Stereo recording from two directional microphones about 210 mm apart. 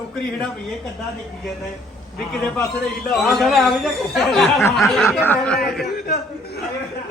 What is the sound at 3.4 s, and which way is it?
A woman's voice, centre (ahead or behind).